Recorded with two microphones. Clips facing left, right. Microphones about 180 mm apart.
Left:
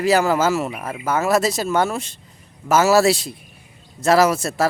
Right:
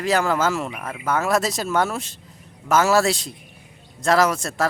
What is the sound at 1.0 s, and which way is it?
A man's voice, 5° left (ahead or behind).